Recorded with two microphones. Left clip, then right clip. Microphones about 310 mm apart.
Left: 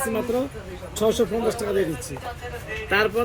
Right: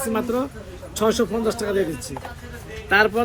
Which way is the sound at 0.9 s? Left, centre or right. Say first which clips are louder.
Right 1 dB; centre.